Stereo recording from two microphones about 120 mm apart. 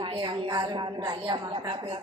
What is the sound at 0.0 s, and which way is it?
A woman's voice, 45° right (ahead or behind).